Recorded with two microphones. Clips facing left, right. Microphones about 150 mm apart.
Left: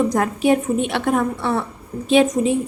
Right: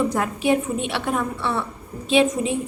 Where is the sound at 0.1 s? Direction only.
45° left (ahead or behind).